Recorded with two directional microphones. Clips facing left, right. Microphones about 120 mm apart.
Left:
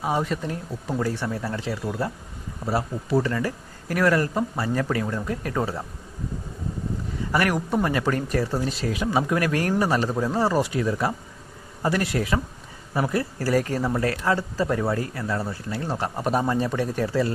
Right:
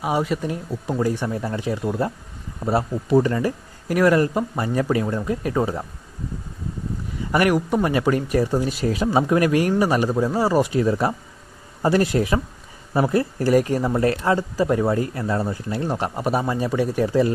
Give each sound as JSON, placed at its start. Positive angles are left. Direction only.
{"t": 0.0, "sound": "speech", "side_deg": -10}
{"t": 7.3, "sound": "speech", "side_deg": -15}
{"t": 8.9, "sound": "speech", "side_deg": -35}
{"t": 9.4, "sound": "speech", "side_deg": -15}
{"t": 10.7, "sound": "speech", "side_deg": -25}